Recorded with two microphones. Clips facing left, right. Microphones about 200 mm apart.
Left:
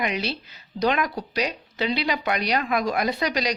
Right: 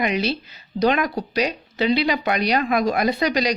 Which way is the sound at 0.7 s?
30° right (ahead or behind).